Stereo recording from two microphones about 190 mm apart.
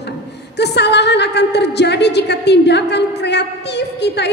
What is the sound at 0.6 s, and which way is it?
A woman's voice, 60° left (ahead or behind).